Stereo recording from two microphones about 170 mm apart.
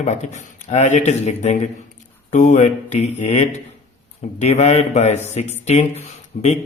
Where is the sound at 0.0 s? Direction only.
45° left (ahead or behind).